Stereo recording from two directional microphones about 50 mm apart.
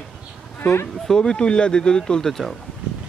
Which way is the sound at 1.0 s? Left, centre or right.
Centre.